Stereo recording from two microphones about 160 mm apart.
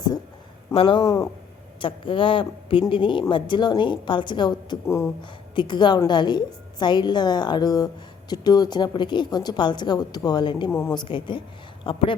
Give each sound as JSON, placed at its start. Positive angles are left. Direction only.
{"t": 0.7, "sound": "a woman's voice", "side_deg": 35}
{"t": 1.8, "sound": "a woman's voice", "side_deg": 30}
{"t": 10.7, "sound": "a woman's voice", "side_deg": 10}
{"t": 10.9, "sound": "a woman's voice", "side_deg": 30}